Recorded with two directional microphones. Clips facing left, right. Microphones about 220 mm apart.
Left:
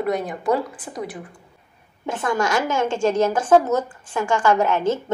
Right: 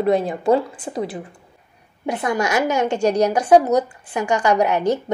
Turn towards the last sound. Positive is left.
turn(degrees=-15)  # may be behind; listen again after turning